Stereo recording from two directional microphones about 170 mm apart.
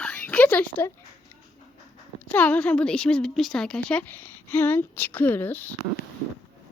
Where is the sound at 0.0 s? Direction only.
5° left (ahead or behind).